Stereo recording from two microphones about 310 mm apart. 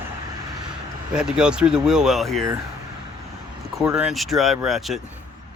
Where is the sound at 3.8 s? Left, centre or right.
Centre.